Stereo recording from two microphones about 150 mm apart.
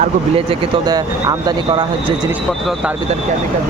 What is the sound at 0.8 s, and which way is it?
Speech, 25° right (ahead or behind).